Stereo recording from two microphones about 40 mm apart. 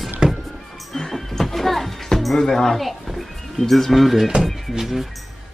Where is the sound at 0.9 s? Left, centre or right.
Centre.